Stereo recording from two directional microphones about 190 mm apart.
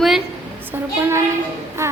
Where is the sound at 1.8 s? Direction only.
15° right (ahead or behind).